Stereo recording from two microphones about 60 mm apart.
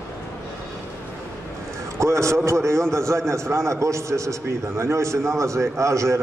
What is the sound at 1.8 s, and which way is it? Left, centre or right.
A man's voice, right.